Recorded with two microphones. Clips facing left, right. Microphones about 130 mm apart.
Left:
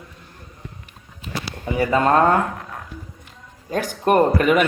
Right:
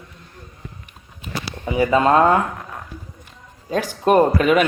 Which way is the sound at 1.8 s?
20° right (ahead or behind).